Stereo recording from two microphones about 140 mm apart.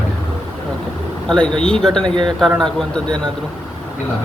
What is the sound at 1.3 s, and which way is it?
Speech, 5° left (ahead or behind).